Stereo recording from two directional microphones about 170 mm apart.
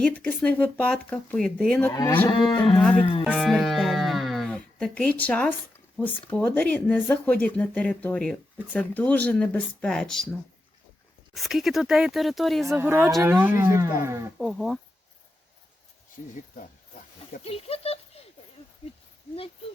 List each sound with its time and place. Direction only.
0.0 s speech: 5° left (ahead or behind)
1.9 s moo: 20° left (ahead or behind)
2.3 s cattle: 30° left (ahead or behind)
2.7 s speech: 5° left (ahead or behind)
3.0 s cattle: 30° left (ahead or behind)
3.2 s speech: centre (ahead or behind)
11.3 s speech: centre (ahead or behind)
12.6 s speech: 15° right (ahead or behind)
14.3 s speech: centre (ahead or behind)
16.2 s speech: 45° left (ahead or behind)
17.4 s a sound: 35° left (ahead or behind)